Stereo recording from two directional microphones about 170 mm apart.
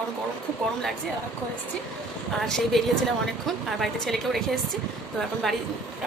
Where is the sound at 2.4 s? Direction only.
Centre (ahead or behind).